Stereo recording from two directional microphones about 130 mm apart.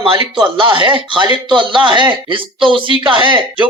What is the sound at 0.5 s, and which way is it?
Speech, 40° right (ahead or behind).